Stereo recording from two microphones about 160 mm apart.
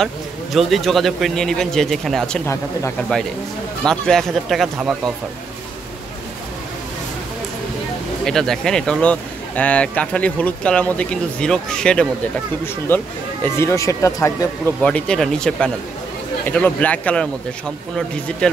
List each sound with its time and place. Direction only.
0.0 s speech: centre (ahead or behind)
2.4 s speech: 20° left (ahead or behind)
3.8 s speech: 5° left (ahead or behind)
8.3 s speech: 5° left (ahead or behind); by 14.5 s 20° left (ahead or behind)
14.8 s speech: 5° left (ahead or behind)
18.4 s speech: 5° left (ahead or behind)